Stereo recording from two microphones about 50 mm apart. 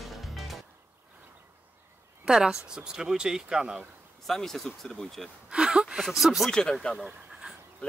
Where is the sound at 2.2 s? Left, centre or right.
Centre.